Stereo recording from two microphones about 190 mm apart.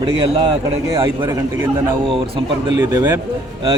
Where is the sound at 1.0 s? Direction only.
15° right (ahead or behind).